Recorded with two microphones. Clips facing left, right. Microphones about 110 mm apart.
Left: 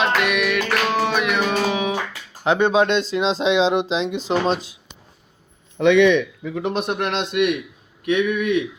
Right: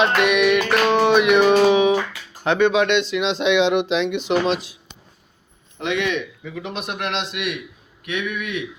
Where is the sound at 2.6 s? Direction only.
30° left (ahead or behind).